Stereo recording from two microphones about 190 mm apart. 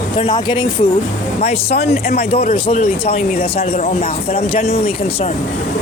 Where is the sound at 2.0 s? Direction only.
55° left (ahead or behind).